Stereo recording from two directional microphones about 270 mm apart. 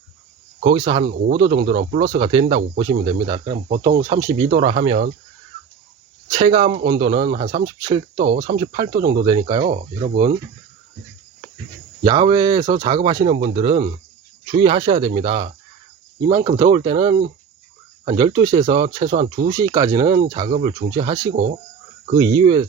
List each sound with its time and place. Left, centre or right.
0.6 s speech: centre
1.0 s speech: right
1.4 s speech: centre
3.5 s speech: right
4.2 s speech: centre
6.3 s speech: centre
9.6 s speech: right
12.0 s speech: centre
19.5 s speech: centre
20.5 s speech: right